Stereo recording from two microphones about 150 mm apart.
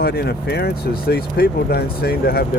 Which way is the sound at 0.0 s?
90° left.